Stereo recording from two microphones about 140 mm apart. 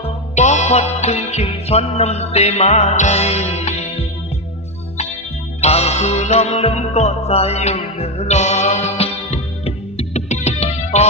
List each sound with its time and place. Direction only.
0.3 s music: 55° left (ahead or behind)
5.5 s music: 50° left (ahead or behind)